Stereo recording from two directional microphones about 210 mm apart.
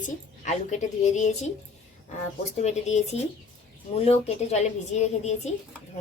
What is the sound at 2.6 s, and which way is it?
A woman's voice, 30° left (ahead or behind).